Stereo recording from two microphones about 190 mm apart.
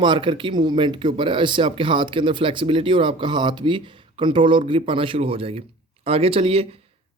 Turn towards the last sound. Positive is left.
turn(degrees=-30)  # may be behind; listen again after turning